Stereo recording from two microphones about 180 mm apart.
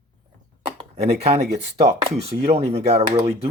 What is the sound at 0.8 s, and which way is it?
Speech, 35° right (ahead or behind).